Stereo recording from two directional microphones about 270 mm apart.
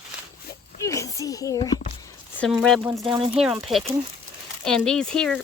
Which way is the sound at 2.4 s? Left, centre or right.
Centre.